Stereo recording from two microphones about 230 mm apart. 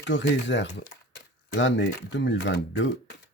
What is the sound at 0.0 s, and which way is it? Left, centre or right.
Speech, left.